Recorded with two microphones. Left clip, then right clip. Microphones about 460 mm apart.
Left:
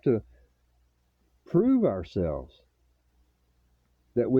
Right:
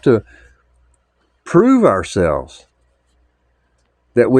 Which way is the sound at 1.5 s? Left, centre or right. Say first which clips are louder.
Right 13 dB; left.